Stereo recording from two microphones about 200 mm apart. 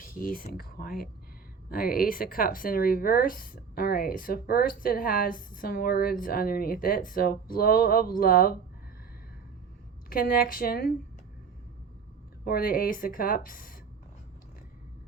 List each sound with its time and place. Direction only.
0.0 s speech: 45° left (ahead or behind)
10.1 s speech: 45° left (ahead or behind)
12.5 s speech: 45° left (ahead or behind)